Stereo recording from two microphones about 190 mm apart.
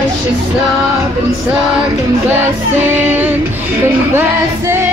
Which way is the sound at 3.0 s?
10° right (ahead or behind).